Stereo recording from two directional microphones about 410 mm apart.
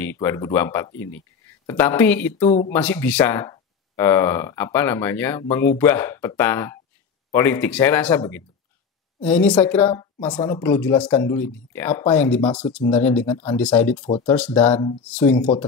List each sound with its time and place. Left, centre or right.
0.0 s a woman's voice: centre
2.4 s speech: centre
2.7 s a woman's voice: centre